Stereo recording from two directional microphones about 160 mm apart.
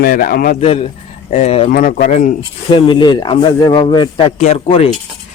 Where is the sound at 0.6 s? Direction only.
40° left (ahead or behind).